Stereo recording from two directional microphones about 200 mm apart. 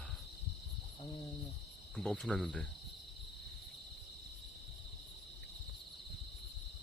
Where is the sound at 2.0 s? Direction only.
Centre (ahead or behind).